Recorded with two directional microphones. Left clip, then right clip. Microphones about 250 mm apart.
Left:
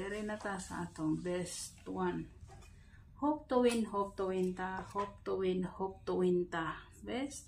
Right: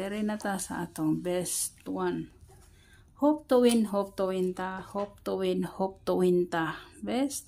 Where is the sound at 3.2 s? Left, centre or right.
Right.